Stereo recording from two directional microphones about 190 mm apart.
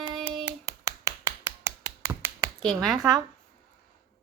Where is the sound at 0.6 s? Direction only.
20° right (ahead or behind).